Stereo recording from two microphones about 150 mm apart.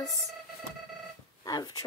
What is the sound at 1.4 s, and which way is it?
Speech, 25° left (ahead or behind).